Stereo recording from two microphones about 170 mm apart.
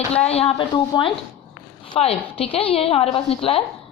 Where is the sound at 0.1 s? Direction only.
35° left (ahead or behind).